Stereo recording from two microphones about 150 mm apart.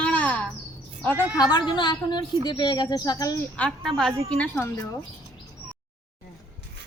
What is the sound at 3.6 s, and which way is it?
Speech, 5° left (ahead or behind).